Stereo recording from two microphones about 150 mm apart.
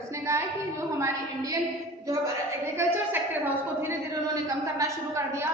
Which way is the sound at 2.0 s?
20° right (ahead or behind).